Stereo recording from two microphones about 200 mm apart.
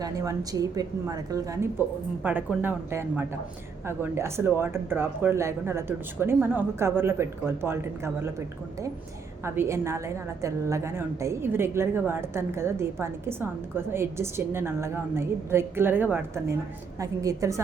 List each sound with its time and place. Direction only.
0.0 s a woman's voice: 15° right (ahead or behind)
9.4 s a woman's voice: 15° right (ahead or behind)